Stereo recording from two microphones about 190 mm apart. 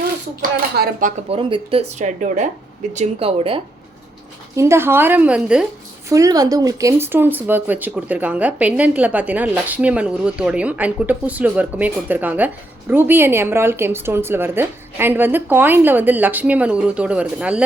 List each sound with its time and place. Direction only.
0.5 s speech: 45° right (ahead or behind)
1.3 s speech: 25° right (ahead or behind)
4.5 s speech: 15° right (ahead or behind)
6.1 s speech: 15° right (ahead or behind)